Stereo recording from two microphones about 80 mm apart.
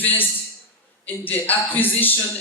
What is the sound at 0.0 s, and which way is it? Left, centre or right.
A man's voice, left.